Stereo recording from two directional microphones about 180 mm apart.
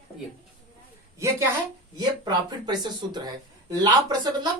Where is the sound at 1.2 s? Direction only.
15° right (ahead or behind).